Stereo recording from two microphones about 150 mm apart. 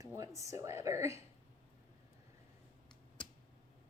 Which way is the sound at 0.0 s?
20° right (ahead or behind).